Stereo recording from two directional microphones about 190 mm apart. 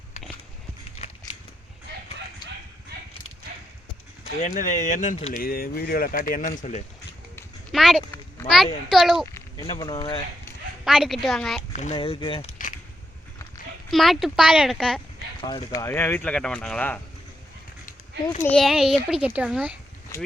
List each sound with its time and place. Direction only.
0.9 s a sound: 30° left (ahead or behind)
4.4 s speech: 40° left (ahead or behind)
7.7 s a child's voice: centre (ahead or behind)
9.2 s a sound: 15° left (ahead or behind)
9.6 s speech: 25° left (ahead or behind)
10.8 s a child's voice: centre (ahead or behind)
11.7 s speech: 35° left (ahead or behind)
13.9 s a child's voice: centre (ahead or behind)
15.4 s speech: 20° left (ahead or behind)
18.4 s a child's voice: centre (ahead or behind)